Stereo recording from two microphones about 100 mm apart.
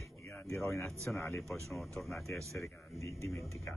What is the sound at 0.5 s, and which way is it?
Speech, 30° left (ahead or behind).